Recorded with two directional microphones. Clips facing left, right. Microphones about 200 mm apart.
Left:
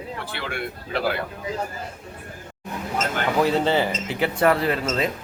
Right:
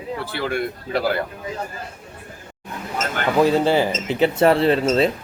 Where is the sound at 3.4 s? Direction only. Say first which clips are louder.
Right 4 dB; 10° right (ahead or behind); by 5.1 s 30° right (ahead or behind).